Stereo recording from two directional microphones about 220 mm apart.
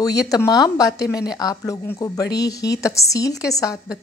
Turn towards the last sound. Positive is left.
turn(degrees=15)  # may be behind; listen again after turning